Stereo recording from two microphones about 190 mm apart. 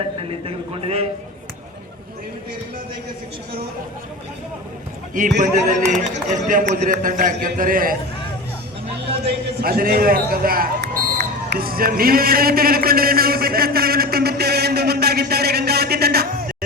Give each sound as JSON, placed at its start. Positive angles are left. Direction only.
{"t": 0.2, "sound": "a man's voice", "side_deg": -30}
{"t": 5.4, "sound": "a man's voice", "side_deg": -40}
{"t": 9.6, "sound": "speech", "side_deg": -50}